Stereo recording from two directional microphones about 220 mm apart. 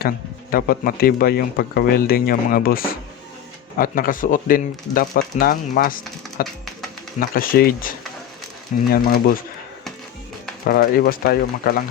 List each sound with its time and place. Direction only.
0.5 s speech: 40° left (ahead or behind)
10.7 s speech: 40° left (ahead or behind)